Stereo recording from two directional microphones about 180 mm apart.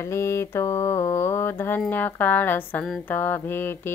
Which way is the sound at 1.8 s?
10° left (ahead or behind).